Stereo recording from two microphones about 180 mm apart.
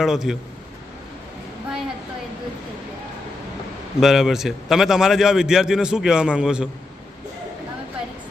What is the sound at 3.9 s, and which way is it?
A man's voice, centre (ahead or behind).